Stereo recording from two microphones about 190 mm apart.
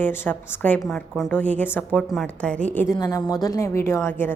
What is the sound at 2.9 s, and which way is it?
Speech, 15° left (ahead or behind).